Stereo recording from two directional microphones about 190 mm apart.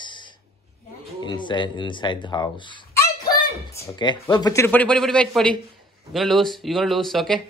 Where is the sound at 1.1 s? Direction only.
25° left (ahead or behind); by 7.4 s centre (ahead or behind).